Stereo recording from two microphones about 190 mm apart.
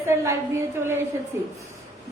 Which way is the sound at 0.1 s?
15° right (ahead or behind).